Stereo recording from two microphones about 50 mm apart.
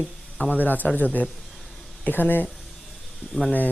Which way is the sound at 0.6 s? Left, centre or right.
Left.